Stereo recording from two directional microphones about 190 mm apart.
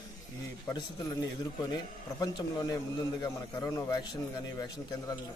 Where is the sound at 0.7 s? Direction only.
20° left (ahead or behind).